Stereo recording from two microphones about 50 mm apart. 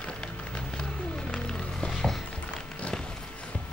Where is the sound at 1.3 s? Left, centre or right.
Centre.